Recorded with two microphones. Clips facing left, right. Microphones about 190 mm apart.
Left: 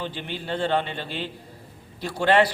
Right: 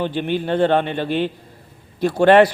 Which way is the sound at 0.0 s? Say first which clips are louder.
Right 11 dB; 55° right (ahead or behind).